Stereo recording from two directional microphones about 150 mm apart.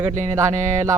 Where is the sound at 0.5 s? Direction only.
50° right (ahead or behind).